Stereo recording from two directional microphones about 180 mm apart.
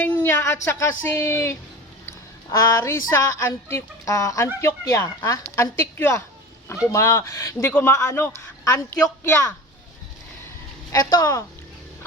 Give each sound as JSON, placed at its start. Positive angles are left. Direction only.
{"t": 0.0, "sound": "a man's voice", "side_deg": 10}
{"t": 2.0, "sound": "a sound", "side_deg": 15}
{"t": 3.1, "sound": "a man's voice", "side_deg": 15}
{"t": 10.9, "sound": "a woman's voice", "side_deg": 20}